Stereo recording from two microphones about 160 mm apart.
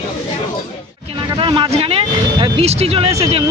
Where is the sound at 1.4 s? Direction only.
30° right (ahead or behind).